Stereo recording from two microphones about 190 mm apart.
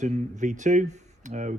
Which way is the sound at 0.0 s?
40° right (ahead or behind).